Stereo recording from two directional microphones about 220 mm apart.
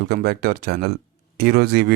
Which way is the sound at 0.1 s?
45° right (ahead or behind).